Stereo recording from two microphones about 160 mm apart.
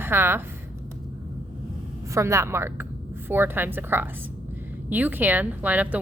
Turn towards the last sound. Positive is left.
turn(degrees=-10)  # may be behind; listen again after turning